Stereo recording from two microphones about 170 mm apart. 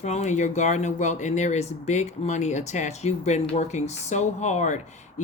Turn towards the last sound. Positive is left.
turn(degrees=45)  # may be behind; listen again after turning